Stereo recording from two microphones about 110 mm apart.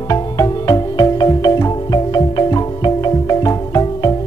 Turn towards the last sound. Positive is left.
turn(degrees=35)  # may be behind; listen again after turning